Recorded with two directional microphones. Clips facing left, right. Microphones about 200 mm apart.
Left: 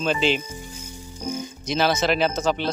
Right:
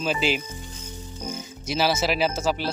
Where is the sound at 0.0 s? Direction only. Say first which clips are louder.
Left 3 dB; 5° right (ahead or behind).